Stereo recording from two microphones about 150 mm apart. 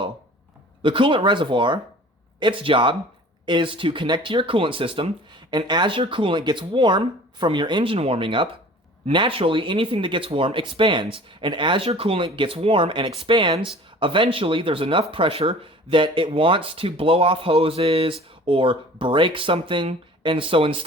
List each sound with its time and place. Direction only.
0.8 s speech: 35° right (ahead or behind)